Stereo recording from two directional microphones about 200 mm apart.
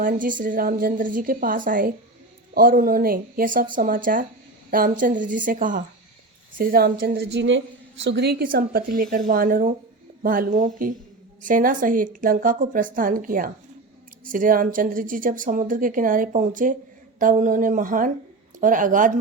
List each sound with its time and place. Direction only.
0.0 s a woman's voice: 40° right (ahead or behind); by 7.6 s 65° right (ahead or behind)
8.0 s a woman's voice: 55° right (ahead or behind); by 19.2 s 40° right (ahead or behind)